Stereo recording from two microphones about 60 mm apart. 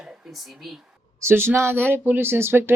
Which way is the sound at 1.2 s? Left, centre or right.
Right.